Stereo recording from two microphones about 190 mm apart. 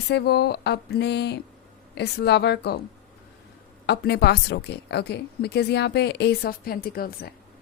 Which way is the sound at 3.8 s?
60° left (ahead or behind).